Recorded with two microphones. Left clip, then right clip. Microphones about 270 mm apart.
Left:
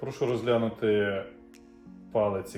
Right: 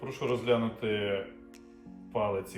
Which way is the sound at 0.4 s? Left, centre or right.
Left.